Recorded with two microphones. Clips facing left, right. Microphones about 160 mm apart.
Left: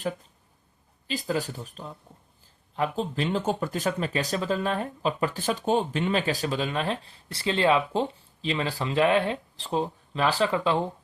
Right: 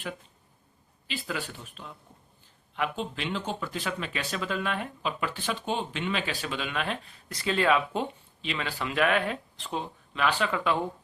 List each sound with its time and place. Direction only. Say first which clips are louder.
1.0 s speech: left 6 dB; 40° left (ahead or behind)